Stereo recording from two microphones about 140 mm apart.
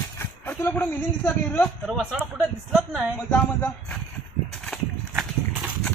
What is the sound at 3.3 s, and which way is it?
Speech, 10° left (ahead or behind).